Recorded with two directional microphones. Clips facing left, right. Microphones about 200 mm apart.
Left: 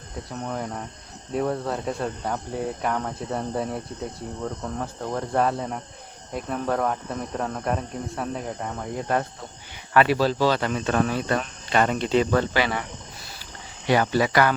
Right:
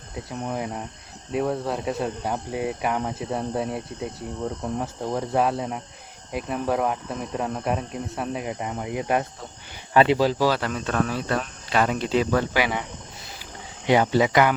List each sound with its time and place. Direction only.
0.3 s speech: 10° right (ahead or behind)
13.8 s speech: 20° right (ahead or behind)